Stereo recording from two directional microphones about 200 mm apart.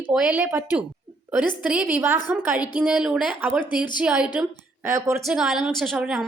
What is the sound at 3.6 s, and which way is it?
Speech, 20° left (ahead or behind).